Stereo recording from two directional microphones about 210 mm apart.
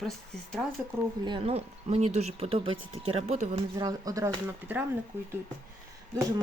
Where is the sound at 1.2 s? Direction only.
25° right (ahead or behind).